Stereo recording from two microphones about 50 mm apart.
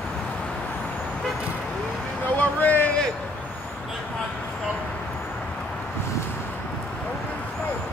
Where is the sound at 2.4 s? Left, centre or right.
Left.